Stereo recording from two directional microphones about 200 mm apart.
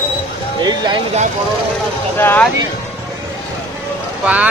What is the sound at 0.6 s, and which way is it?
Speech, 20° right (ahead or behind).